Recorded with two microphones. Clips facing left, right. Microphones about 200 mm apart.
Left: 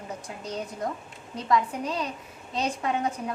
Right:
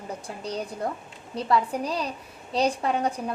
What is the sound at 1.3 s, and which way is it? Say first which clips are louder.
A woman's voice: right 1 dB; 35° right (ahead or behind).